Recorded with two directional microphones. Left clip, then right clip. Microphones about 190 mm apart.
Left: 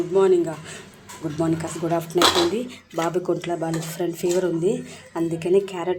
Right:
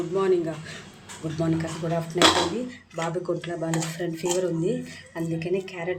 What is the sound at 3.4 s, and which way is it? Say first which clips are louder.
Speech: left 3 dB; 10° left (ahead or behind).